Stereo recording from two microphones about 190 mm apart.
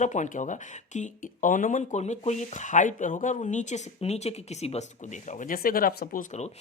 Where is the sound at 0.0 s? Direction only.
40° left (ahead or behind).